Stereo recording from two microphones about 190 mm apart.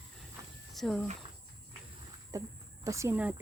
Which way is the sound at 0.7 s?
Centre (ahead or behind).